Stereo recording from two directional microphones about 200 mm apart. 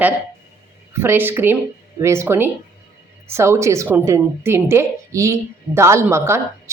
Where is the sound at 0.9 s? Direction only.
10° right (ahead or behind).